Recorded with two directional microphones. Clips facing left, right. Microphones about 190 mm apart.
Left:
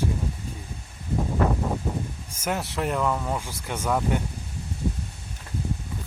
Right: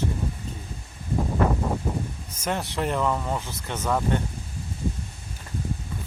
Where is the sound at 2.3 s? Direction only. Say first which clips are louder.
Even; 5° left (ahead or behind).